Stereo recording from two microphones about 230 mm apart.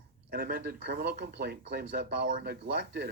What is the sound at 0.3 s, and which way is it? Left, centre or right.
Speech, right.